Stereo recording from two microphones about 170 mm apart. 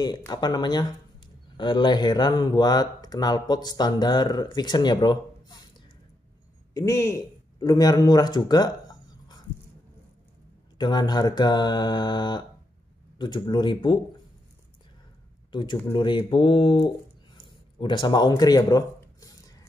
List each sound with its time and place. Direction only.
0.3 s speech: 25° left (ahead or behind)
6.7 s speech: 20° left (ahead or behind)
10.8 s speech: 25° left (ahead or behind)
15.5 s speech: 30° left (ahead or behind)